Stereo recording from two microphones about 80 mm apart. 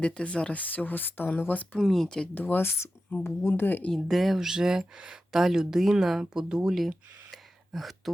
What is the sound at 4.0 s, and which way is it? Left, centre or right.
Speech, centre.